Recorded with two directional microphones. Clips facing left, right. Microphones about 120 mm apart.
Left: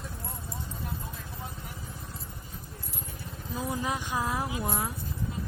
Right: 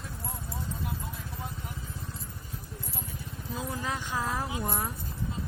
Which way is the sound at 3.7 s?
15° left (ahead or behind).